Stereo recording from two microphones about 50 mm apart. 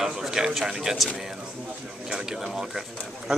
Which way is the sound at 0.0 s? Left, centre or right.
Centre.